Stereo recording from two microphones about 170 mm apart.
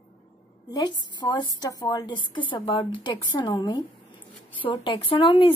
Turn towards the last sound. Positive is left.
turn(degrees=30)  # may be behind; listen again after turning